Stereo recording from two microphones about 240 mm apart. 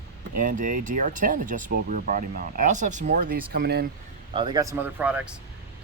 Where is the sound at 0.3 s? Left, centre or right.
Right.